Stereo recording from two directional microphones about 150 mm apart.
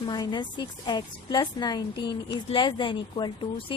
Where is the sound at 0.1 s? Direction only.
30° left (ahead or behind).